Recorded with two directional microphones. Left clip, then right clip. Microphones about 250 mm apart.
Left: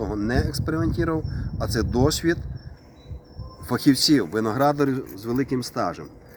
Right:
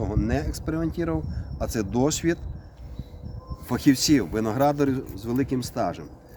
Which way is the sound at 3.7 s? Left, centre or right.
Centre.